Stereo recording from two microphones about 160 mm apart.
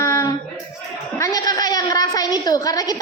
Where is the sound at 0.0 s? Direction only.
20° left (ahead or behind).